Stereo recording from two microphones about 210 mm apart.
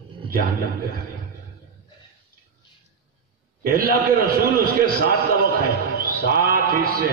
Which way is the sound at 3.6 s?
45° right (ahead or behind).